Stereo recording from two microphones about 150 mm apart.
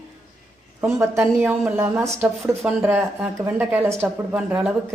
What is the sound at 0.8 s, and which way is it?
Speech, 15° right (ahead or behind).